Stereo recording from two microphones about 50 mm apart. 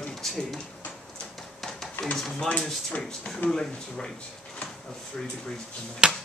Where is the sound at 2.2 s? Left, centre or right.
Centre.